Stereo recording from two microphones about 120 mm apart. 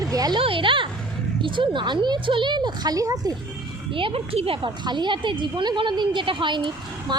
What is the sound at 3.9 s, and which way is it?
Speech, 50° right (ahead or behind).